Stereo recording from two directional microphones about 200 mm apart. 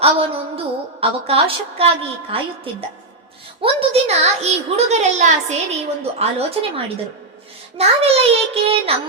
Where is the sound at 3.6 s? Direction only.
30° right (ahead or behind).